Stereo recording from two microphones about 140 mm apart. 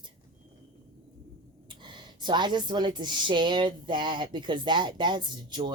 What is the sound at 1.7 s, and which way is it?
Speech, 35° right (ahead or behind).